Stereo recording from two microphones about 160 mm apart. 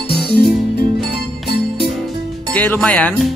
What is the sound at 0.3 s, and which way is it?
Music, 90° left.